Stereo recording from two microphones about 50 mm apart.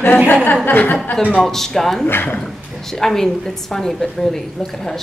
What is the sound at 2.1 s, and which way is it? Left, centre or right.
Speech, left.